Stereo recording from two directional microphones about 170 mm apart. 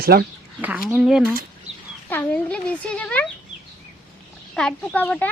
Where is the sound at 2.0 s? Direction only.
10° left (ahead or behind).